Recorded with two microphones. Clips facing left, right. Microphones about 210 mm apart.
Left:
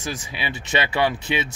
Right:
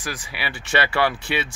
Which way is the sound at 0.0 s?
20° left (ahead or behind).